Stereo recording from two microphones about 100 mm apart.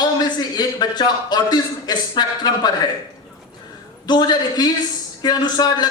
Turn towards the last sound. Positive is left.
turn(degrees=45)  # may be behind; listen again after turning